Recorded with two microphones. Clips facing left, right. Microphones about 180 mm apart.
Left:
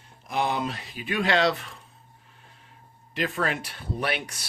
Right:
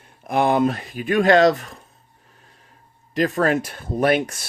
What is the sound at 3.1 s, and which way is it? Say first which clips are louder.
Speech: right 9 dB; 40° right (ahead or behind).